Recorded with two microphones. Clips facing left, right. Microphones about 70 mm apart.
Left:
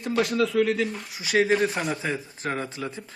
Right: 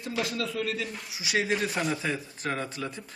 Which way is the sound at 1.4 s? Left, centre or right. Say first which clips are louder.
Left 6 dB; left.